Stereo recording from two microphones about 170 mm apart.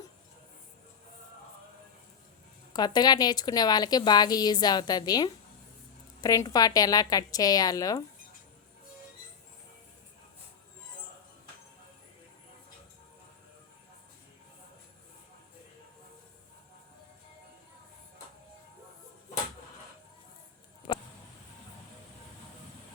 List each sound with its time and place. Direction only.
2.7 s a woman's voice: 25° left (ahead or behind)